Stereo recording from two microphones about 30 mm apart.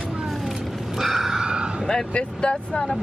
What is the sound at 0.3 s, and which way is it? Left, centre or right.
Vehicle, centre.